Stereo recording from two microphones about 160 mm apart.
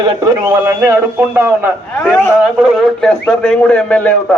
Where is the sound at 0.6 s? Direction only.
20° right (ahead or behind).